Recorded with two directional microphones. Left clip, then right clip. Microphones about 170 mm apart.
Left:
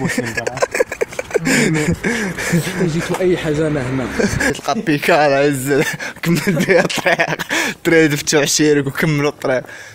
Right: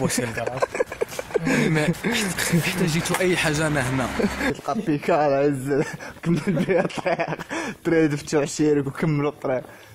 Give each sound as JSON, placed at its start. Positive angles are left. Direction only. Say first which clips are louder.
{"t": 0.4, "sound": "a sound", "louder": "left 8 dB", "side_deg": -5}
{"t": 2.1, "sound": "speech", "louder": "left 4 dB", "side_deg": -15}
{"t": 4.2, "sound": "speech", "louder": "left 7 dB", "side_deg": -5}